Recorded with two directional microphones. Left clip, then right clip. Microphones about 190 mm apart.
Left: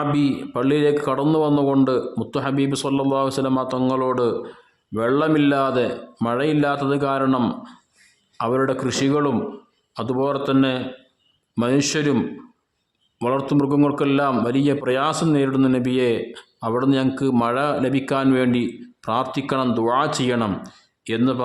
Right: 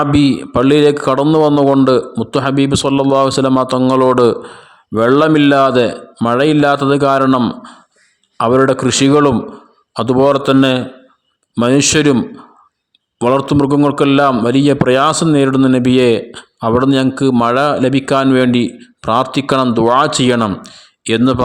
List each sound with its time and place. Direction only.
0.0 s a man's voice: 40° right (ahead or behind)
13.2 s a man's voice: 35° right (ahead or behind)